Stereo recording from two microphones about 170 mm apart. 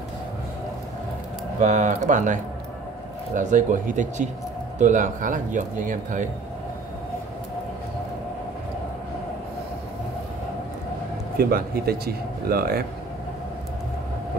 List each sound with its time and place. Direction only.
1.6 s speech: 50° right (ahead or behind)
11.3 s speech: 65° right (ahead or behind)